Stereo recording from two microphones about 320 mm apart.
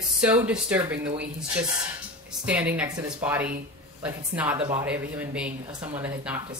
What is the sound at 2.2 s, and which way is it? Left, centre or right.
Speech, centre.